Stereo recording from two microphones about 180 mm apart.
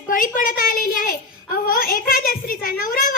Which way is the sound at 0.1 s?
50° left (ahead or behind).